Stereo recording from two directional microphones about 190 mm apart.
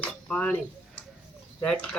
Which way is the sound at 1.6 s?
5° left (ahead or behind).